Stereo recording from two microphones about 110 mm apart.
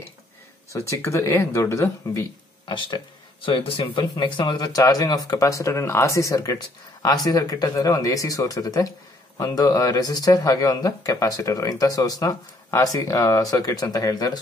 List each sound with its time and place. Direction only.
0.7 s speech: 30° left (ahead or behind)
2.6 s speech: 45° left (ahead or behind)